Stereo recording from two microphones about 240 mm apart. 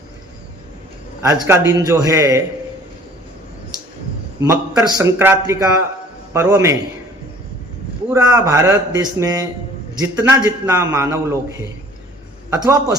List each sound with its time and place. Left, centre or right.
1.2 s a man's voice: centre
4.4 s a man's voice: centre
8.1 s a man's voice: centre